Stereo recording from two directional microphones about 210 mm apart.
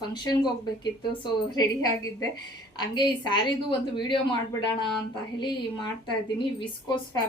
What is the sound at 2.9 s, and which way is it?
Speech, 20° left (ahead or behind).